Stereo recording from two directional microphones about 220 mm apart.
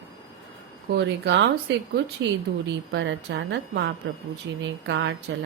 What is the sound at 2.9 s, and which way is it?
A woman's voice, 55° right (ahead or behind).